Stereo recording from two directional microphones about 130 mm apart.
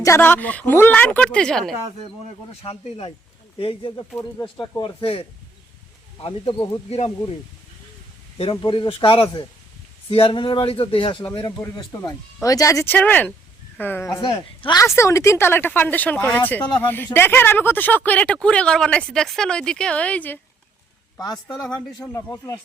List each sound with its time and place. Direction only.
0.0 s speech: 20° left (ahead or behind)
2.6 s speech: 45° left (ahead or behind)
8.4 s speech: 40° left (ahead or behind)
11.6 s speech: 25° left (ahead or behind)
14.2 s speech: 40° left (ahead or behind)
14.8 s speech: 20° left (ahead or behind)
21.9 s speech: 25° left (ahead or behind)